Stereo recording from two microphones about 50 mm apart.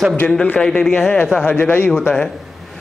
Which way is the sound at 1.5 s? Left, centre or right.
Left.